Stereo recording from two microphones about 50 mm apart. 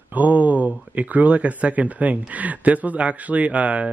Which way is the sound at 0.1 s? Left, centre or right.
Right.